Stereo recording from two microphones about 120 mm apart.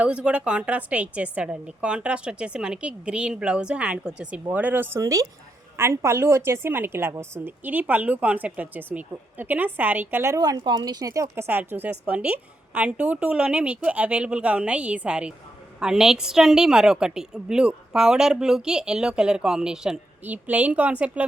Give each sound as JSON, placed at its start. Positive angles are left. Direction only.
{"t": 0.0, "sound": "a woman's voice", "side_deg": -10}
{"t": 10.6, "sound": "a woman's voice", "side_deg": -40}